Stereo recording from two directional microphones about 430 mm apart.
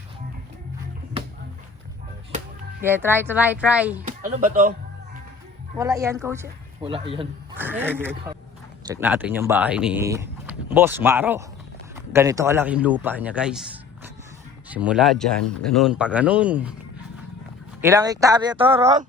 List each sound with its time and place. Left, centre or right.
2.8 s speech: centre
4.0 s speech: centre
5.7 s a man's voice: centre
17.7 s speech: centre